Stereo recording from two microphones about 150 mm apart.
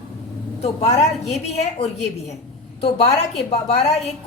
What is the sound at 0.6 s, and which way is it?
Speech, 50° left (ahead or behind).